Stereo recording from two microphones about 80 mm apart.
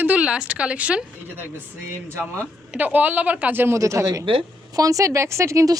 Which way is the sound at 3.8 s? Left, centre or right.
Right.